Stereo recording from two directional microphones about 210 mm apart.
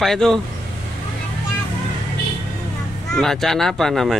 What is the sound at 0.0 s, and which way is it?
Speech, centre (ahead or behind).